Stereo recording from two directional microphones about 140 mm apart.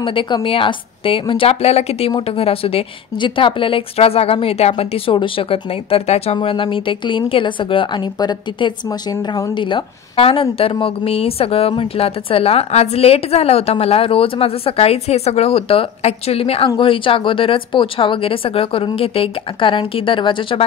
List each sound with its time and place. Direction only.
0.0 s a woman's voice: 40° left (ahead or behind)